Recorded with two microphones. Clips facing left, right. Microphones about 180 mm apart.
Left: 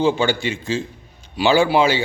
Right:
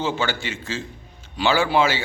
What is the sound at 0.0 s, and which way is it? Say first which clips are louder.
A man's voice: left 7 dB; 15° left (ahead or behind).